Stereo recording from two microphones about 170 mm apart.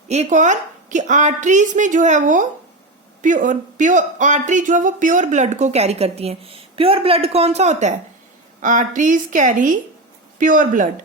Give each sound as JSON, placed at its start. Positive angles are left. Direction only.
{"t": 0.1, "sound": "speech", "side_deg": -45}